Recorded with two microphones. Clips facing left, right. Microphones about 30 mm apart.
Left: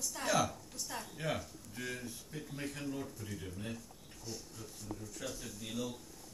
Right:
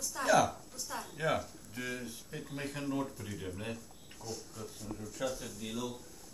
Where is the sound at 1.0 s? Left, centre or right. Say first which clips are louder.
Right 5 dB; centre.